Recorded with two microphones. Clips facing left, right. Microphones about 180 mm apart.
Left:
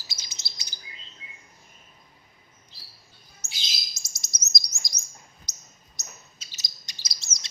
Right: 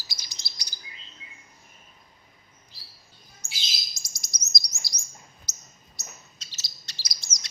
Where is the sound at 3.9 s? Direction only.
25° left (ahead or behind).